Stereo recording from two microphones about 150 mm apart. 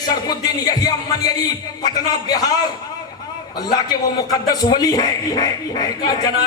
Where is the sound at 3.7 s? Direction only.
25° left (ahead or behind).